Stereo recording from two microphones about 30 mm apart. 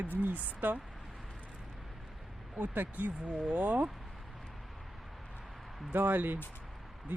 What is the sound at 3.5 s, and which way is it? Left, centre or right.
Speech, right.